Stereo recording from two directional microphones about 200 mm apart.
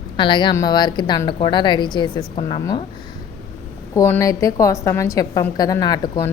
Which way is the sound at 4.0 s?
15° left (ahead or behind).